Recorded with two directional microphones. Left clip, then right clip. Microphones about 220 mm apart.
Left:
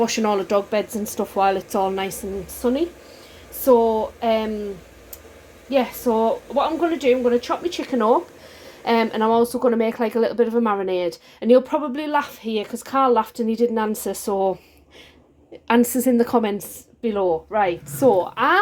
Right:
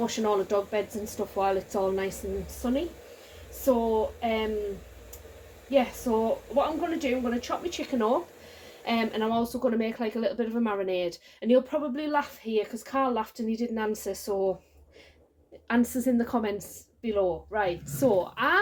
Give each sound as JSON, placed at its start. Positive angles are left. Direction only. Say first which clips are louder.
{"t": 0.0, "sound": "speech", "louder": "left 7 dB", "side_deg": 40}
{"t": 3.7, "sound": "speech", "louder": "left 9 dB", "side_deg": 45}
{"t": 6.2, "sound": "speech", "louder": "left 6 dB", "side_deg": 45}
{"t": 15.6, "sound": "speech", "louder": "left 9 dB", "side_deg": 40}